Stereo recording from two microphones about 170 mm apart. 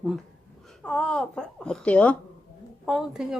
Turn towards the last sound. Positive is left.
turn(degrees=0)  # may be behind; listen again after turning